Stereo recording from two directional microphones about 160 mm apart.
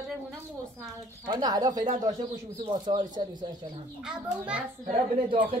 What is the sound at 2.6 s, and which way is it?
Speech, 30° right (ahead or behind).